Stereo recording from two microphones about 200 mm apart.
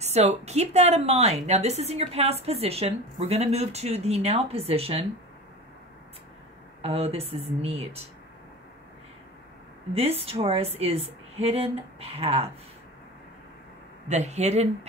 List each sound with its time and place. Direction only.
0.0 s a woman's voice: 35° right (ahead or behind)
6.8 s speech: 30° right (ahead or behind)
9.9 s a woman's voice: 30° right (ahead or behind)
14.0 s a woman's voice: 35° right (ahead or behind)